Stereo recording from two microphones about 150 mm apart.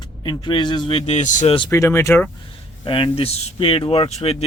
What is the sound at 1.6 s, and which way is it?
Speech, 20° left (ahead or behind).